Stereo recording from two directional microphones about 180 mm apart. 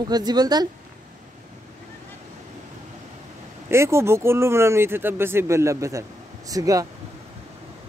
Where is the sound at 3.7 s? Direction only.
15° right (ahead or behind).